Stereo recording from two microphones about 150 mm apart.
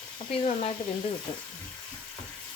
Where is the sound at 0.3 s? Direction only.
40° left (ahead or behind).